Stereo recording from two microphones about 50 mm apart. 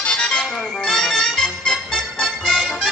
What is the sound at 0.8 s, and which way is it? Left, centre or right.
Music, centre.